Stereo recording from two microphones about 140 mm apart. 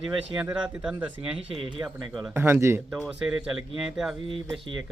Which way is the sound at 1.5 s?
35° right (ahead or behind).